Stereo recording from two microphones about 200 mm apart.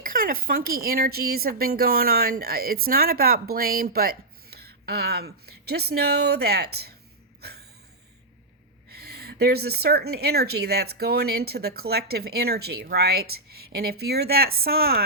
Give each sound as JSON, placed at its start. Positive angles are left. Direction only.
{"t": 0.0, "sound": "speech", "side_deg": -45}
{"t": 8.9, "sound": "speech", "side_deg": -50}